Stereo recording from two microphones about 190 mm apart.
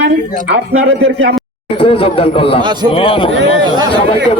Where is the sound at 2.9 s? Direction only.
25° left (ahead or behind).